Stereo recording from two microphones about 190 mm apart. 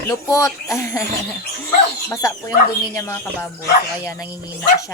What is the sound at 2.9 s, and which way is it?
Chopping, 15° left (ahead or behind).